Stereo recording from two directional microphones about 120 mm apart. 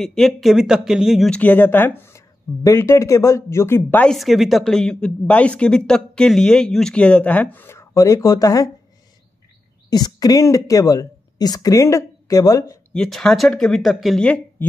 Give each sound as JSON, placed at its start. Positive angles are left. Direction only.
{"t": 0.0, "sound": "speech", "side_deg": 5}
{"t": 1.3, "sound": "speech", "side_deg": 15}
{"t": 4.1, "sound": "speech", "side_deg": 0}
{"t": 9.8, "sound": "speech", "side_deg": 35}
{"t": 12.9, "sound": "speech", "side_deg": 5}